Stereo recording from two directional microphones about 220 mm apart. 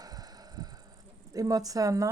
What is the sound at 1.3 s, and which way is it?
Speech, 15° right (ahead or behind).